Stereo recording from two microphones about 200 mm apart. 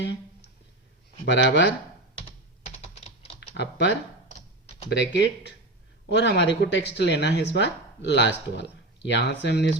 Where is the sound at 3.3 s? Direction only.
60° left (ahead or behind).